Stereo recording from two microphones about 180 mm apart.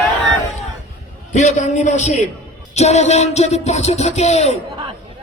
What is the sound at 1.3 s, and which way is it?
Speech, 40° left (ahead or behind).